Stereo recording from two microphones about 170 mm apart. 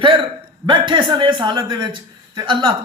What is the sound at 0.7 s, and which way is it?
A man's voice, 30° right (ahead or behind).